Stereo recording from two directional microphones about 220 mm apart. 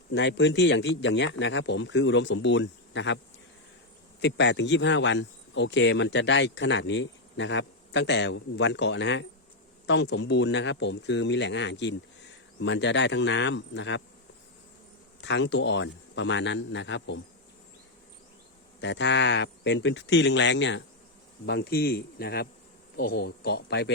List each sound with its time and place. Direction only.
0.1 s a man's voice: 55° left (ahead or behind)
4.2 s a man's voice: 50° left (ahead or behind)
15.2 s speech: 55° left (ahead or behind)
18.8 s a man's voice: 55° left (ahead or behind)